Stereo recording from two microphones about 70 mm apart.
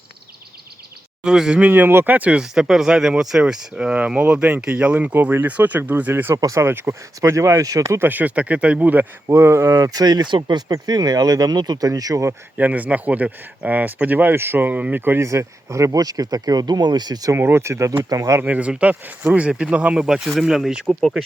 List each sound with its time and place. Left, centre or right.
1.2 s speech: centre
1.6 s speech: right
2.1 s speech: right
2.4 s speech: centre; by 6.3 s right
6.3 s speech: right
6.7 s speech: right
7.2 s speech: right
7.9 s speech: right
9.2 s speech: right
12.5 s speech: right
15.2 s speech: right
17.3 s speech: right
18.4 s speech: centre